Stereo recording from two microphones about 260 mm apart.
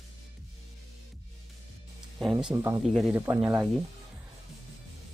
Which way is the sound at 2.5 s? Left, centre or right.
Centre.